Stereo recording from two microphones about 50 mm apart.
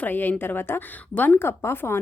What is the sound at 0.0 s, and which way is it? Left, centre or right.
Speech, left.